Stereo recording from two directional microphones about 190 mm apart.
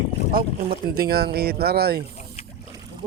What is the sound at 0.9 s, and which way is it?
Speech, 55° right (ahead or behind).